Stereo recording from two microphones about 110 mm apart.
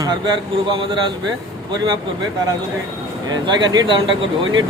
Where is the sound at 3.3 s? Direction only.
45° right (ahead or behind).